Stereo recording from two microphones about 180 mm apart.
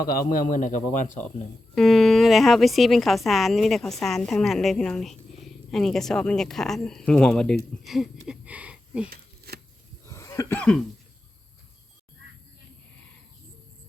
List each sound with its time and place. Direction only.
0.0 s a man's voice: 50° left (ahead or behind)
1.7 s a woman's voice: centre (ahead or behind)
9.0 s a sound: 60° right (ahead or behind)
10.1 s cough: 15° left (ahead or behind)
10.6 s a woman's voice: 5° left (ahead or behind)